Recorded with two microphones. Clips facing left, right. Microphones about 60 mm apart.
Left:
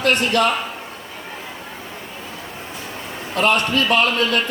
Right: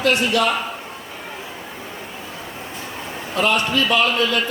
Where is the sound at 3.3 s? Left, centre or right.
Left.